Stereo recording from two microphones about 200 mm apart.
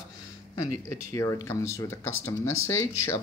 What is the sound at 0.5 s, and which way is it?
Speech, 15° left (ahead or behind).